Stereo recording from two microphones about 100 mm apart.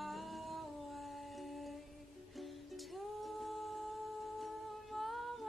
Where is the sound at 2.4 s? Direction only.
Centre (ahead or behind).